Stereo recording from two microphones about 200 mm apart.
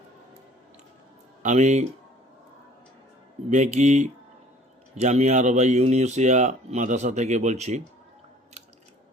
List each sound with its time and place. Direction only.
1.4 s speech: 35° right (ahead or behind)
3.5 s speech: 35° right (ahead or behind)